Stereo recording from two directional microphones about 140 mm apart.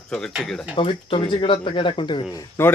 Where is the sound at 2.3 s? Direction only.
25° left (ahead or behind).